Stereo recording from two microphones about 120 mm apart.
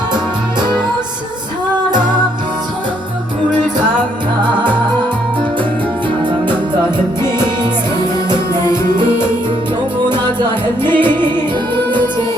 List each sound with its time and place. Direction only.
7.2 s music: 40° right (ahead or behind)
10.9 s music: 40° right (ahead or behind)